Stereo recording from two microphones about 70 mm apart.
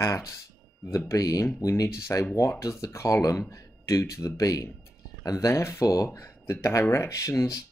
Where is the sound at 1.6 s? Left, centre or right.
Left.